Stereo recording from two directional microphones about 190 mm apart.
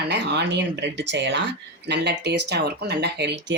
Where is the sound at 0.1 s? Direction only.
65° right (ahead or behind).